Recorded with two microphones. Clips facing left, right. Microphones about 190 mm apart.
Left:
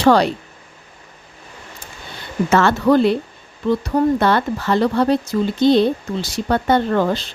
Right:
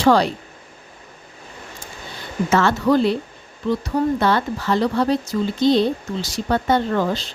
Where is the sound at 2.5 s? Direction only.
60° left (ahead or behind).